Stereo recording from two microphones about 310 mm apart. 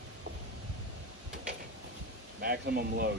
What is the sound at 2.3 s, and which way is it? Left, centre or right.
Speech, right.